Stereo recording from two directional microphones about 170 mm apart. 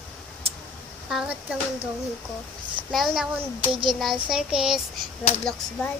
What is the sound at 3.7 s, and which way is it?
Speech, 30° right (ahead or behind).